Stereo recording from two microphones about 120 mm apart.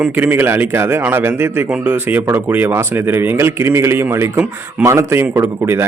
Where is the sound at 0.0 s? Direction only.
15° right (ahead or behind).